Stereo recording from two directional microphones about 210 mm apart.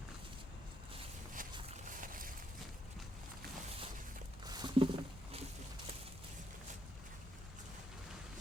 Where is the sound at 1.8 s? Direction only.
40° right (ahead or behind).